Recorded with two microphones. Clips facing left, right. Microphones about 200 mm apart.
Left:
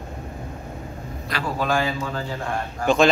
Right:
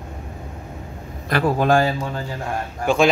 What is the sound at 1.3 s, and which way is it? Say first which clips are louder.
Speech: right 7 dB; 55° right (ahead or behind).